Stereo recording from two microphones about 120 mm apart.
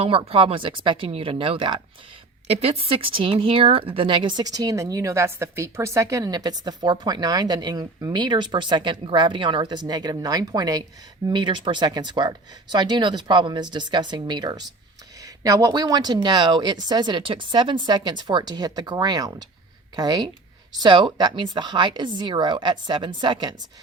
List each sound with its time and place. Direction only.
0.0 s speech: 50° right (ahead or behind)
2.5 s a woman's voice: 55° right (ahead or behind); by 23.6 s 40° right (ahead or behind)